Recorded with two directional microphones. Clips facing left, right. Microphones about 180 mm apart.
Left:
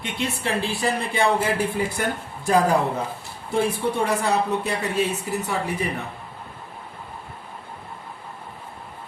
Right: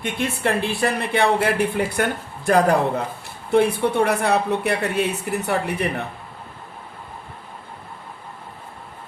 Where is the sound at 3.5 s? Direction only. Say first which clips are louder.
Right 5 dB; 65° right (ahead or behind).